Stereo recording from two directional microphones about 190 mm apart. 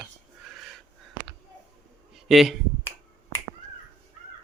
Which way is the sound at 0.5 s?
Centre (ahead or behind).